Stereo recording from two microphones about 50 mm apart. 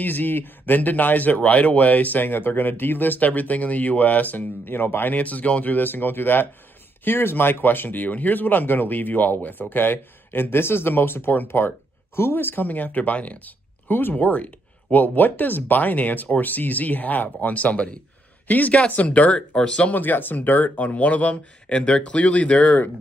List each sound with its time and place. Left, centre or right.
0.0 s speech: left
14.1 s speech: left
19.9 s speech: left